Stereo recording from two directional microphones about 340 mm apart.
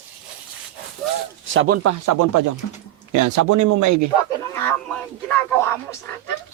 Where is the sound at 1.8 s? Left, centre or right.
Right.